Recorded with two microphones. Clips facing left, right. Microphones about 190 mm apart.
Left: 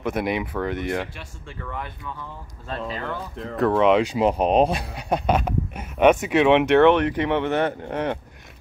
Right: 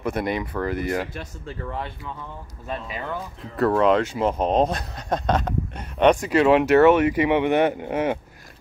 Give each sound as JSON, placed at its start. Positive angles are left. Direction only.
{"t": 0.0, "sound": "speech", "side_deg": 0}
{"t": 1.1, "sound": "speech", "side_deg": -35}
{"t": 2.7, "sound": "speech", "side_deg": -15}
{"t": 3.5, "sound": "speech", "side_deg": 0}
{"t": 4.0, "sound": "speech", "side_deg": 15}